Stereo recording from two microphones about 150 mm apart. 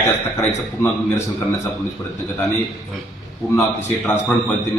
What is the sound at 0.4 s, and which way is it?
Speech, 20° left (ahead or behind).